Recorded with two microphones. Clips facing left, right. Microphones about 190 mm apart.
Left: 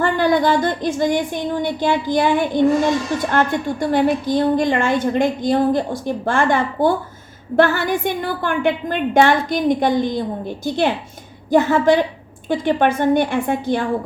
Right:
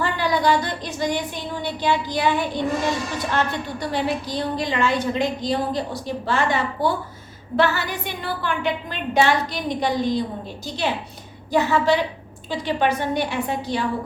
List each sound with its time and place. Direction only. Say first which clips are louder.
0.0 s a woman's voice: left 5 dB; 50° left (ahead or behind)